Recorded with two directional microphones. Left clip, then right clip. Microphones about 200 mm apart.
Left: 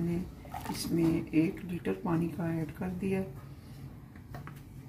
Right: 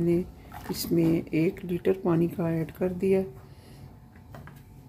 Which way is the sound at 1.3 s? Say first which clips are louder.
Right 3 dB; 55° right (ahead or behind).